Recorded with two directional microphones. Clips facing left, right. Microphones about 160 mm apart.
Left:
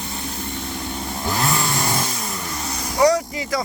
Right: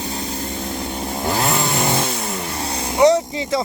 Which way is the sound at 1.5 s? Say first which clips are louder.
Right 3 dB; 25° right (ahead or behind).